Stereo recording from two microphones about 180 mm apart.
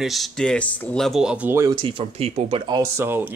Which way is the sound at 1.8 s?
30° right (ahead or behind).